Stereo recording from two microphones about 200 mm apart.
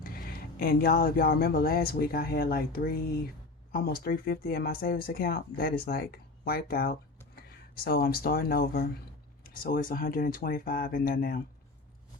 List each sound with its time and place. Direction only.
0.0 s speech: 45° left (ahead or behind)